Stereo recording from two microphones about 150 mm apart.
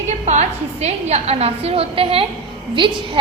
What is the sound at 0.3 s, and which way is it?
A woman's voice, 45° right (ahead or behind).